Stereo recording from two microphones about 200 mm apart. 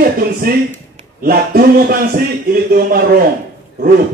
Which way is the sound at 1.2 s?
50° right (ahead or behind).